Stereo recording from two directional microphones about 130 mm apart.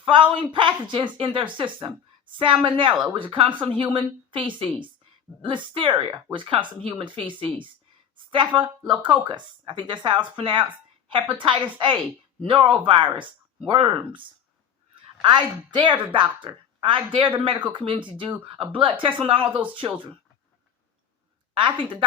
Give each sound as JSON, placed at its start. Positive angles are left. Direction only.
{"t": 0.0, "sound": "a woman's voice", "side_deg": -40}